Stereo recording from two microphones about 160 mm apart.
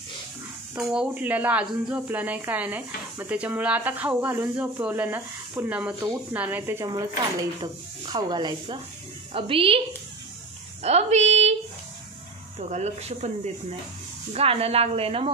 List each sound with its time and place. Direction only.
0.7 s speech: 5° right (ahead or behind)
7.6 s a woman's voice: 25° right (ahead or behind)
10.8 s a woman's voice: 45° right (ahead or behind)
12.5 s a woman's voice: 45° right (ahead or behind)